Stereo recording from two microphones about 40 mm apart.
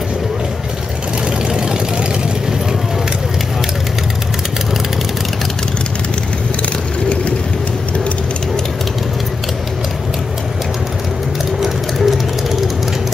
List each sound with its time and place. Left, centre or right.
1.5 s vehicle: centre
11.6 s vehicle: centre